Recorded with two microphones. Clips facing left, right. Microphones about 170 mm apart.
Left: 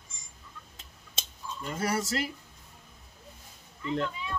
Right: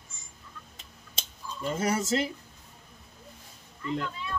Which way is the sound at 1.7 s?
20° right (ahead or behind).